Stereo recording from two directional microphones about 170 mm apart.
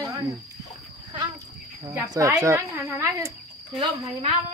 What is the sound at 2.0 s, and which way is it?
A woman's voice, 20° right (ahead or behind).